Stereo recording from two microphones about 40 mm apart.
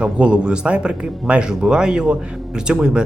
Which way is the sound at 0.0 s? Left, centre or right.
Right.